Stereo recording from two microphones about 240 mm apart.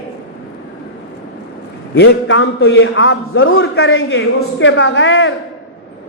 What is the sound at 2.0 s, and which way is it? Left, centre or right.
A man's voice, left.